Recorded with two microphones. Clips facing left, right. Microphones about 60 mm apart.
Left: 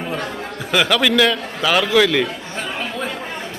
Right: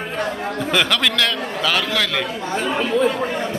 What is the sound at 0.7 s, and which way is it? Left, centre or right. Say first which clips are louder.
A man's voice: left 4 dB; centre.